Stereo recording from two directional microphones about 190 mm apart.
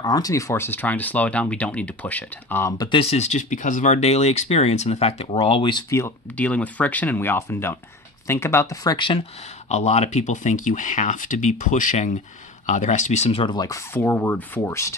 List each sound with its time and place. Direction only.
0.0 s speech: 20° left (ahead or behind)
2.9 s speech: 30° left (ahead or behind); by 15.0 s 15° left (ahead or behind)